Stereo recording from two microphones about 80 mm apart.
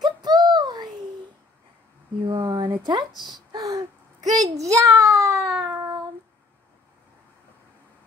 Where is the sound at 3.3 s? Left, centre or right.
Right.